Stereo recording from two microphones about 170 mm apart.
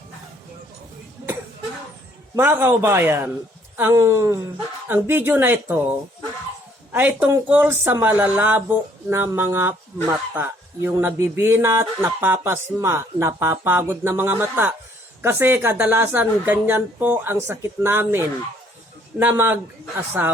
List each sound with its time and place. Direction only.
2.3 s a man's voice: 15° right (ahead or behind)
6.9 s a man's voice: 10° right (ahead or behind)